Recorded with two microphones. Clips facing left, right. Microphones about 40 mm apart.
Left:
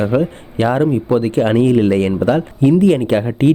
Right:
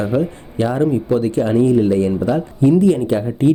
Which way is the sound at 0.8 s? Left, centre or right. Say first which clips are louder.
Left 2 dB; left.